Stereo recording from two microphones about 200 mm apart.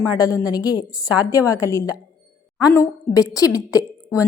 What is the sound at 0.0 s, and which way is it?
A woman's voice, 15° left (ahead or behind).